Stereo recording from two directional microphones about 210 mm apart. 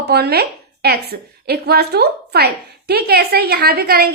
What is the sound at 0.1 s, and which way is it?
A woman's voice, 50° right (ahead or behind).